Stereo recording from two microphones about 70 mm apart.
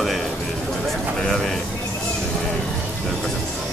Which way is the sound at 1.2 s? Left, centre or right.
Centre.